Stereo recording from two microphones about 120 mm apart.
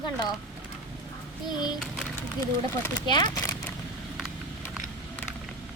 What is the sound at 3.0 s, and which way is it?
Speech, 35° left (ahead or behind).